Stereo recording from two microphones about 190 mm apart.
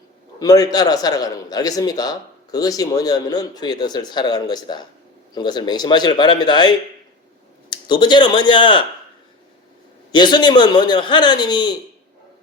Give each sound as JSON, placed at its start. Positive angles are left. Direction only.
{"t": 0.3, "sound": "a man's voice", "side_deg": 20}
{"t": 10.1, "sound": "a man's voice", "side_deg": 25}